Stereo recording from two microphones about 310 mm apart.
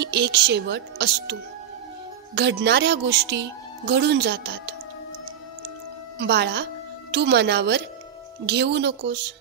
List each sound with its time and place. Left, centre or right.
0.0 s speech: right
6.1 s speech: right